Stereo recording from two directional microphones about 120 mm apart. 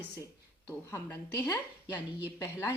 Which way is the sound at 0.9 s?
20° left (ahead or behind).